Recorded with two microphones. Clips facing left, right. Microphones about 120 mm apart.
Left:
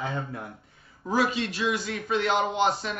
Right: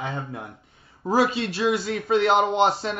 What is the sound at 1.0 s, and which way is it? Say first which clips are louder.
A man's voice: right 4 dB; 35° right (ahead or behind).